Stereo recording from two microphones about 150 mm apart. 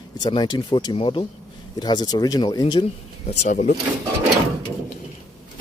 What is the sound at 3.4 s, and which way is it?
Speech, 55° left (ahead or behind).